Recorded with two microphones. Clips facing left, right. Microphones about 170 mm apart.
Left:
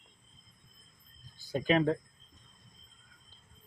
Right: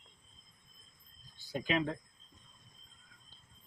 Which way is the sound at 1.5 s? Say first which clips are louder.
Left 6 dB; 45° left (ahead or behind).